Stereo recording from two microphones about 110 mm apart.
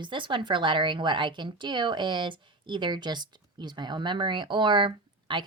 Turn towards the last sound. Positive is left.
turn(degrees=-45)  # may be behind; listen again after turning